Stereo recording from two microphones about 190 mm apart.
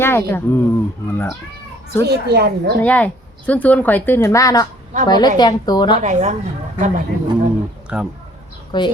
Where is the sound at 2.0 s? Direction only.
60° right (ahead or behind).